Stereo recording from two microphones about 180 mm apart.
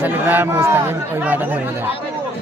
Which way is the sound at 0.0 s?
10° right (ahead or behind).